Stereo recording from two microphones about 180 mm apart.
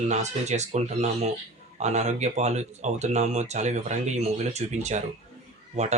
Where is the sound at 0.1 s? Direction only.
40° right (ahead or behind).